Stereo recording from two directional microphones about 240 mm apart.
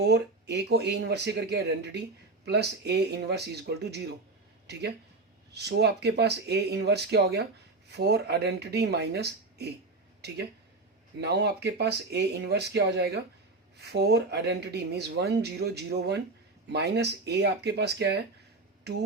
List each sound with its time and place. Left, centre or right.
0.0 s speech: right